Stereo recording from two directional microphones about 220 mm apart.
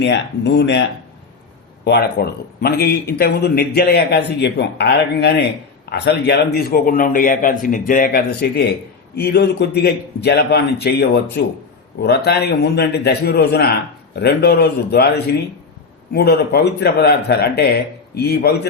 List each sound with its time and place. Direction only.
0.0 s a man's voice: 50° left (ahead or behind)